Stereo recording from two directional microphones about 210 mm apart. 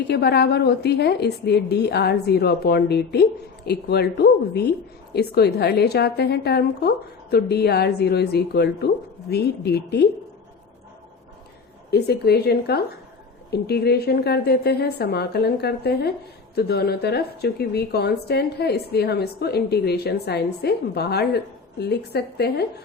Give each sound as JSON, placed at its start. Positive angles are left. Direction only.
{"t": 0.1, "sound": "a woman's voice", "side_deg": 50}
{"t": 11.9, "sound": "a woman's voice", "side_deg": 50}